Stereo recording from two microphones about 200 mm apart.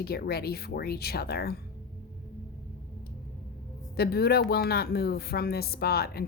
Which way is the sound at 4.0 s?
50° left (ahead or behind).